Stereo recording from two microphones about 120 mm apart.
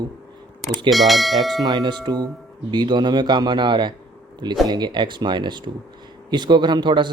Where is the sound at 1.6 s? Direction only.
35° right (ahead or behind).